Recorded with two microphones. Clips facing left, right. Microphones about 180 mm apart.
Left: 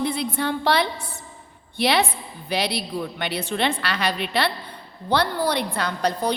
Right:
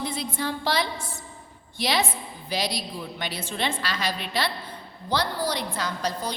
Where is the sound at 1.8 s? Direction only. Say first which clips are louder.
Left 5 dB; 60° left (ahead or behind).